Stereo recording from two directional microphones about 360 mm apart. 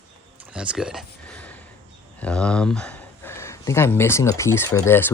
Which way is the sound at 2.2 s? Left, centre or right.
Centre.